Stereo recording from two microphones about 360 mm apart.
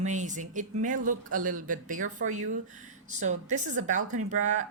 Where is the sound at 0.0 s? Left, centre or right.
Centre.